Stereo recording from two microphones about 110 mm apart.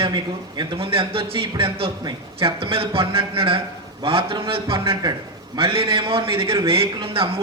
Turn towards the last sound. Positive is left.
turn(degrees=-55)  # may be behind; listen again after turning